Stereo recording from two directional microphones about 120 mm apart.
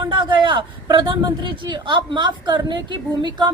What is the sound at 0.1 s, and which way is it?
A woman's voice, 40° right (ahead or behind).